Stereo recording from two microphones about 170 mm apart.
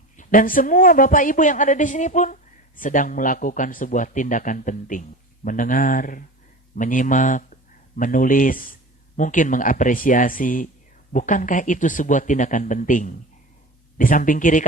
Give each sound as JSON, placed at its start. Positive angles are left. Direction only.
{"t": 0.2, "sound": "a woman's voice", "side_deg": 55}